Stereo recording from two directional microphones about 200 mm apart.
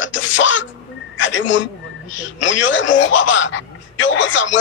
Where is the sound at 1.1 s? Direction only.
70° left (ahead or behind).